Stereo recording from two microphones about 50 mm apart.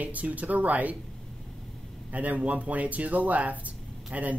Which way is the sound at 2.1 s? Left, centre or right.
Right.